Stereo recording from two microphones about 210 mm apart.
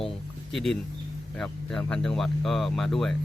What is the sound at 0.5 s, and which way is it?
Speech, centre (ahead or behind).